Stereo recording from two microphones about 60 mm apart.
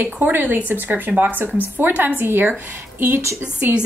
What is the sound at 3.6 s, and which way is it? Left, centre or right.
Speech, right.